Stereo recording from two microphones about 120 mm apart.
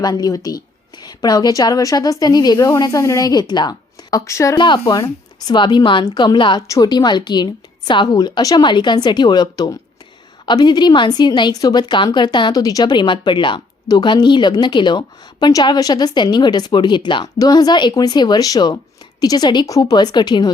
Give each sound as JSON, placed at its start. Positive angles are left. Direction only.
{"t": 0.0, "sound": "a woman's voice", "side_deg": 35}
{"t": 4.5, "sound": "a woman's voice", "side_deg": 40}
{"t": 6.6, "sound": "a woman's voice", "side_deg": 30}